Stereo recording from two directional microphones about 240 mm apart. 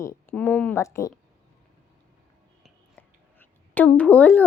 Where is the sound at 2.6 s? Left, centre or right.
Centre.